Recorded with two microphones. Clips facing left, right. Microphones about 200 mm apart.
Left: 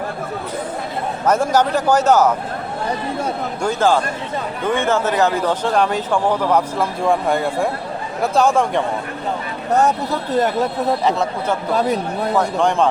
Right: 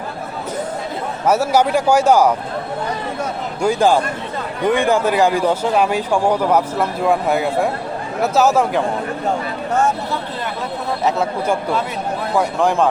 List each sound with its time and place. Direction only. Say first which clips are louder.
1.2 s speech: right 1 dB; 10° right (ahead or behind)
3.6 s speech: right 2 dB; 10° right (ahead or behind)
11.0 s speech: right 1 dB; 5° right (ahead or behind)
11.7 s speech: left 4 dB; 40° left (ahead or behind)
12.4 s speech: right 1 dB; 5° right (ahead or behind)